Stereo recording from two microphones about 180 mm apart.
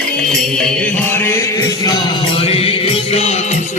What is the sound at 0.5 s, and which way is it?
Music, 5° left (ahead or behind).